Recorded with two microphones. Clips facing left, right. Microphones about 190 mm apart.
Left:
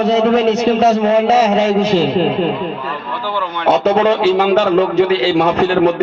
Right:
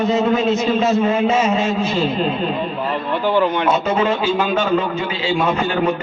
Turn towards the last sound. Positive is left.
turn(degrees=75)  # may be behind; listen again after turning